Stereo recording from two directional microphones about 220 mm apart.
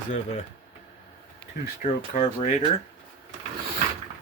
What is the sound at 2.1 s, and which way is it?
Speech, 30° left (ahead or behind).